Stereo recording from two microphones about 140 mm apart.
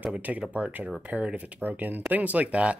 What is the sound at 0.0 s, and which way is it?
Speech, 10° right (ahead or behind).